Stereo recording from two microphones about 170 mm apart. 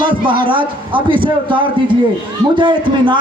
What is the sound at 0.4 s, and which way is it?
Speech, 30° right (ahead or behind).